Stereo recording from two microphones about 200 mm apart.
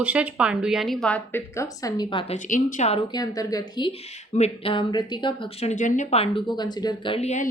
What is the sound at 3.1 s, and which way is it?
Speech, 20° left (ahead or behind).